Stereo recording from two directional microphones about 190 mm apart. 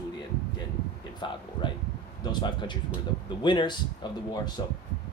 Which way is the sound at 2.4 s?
25° left (ahead or behind).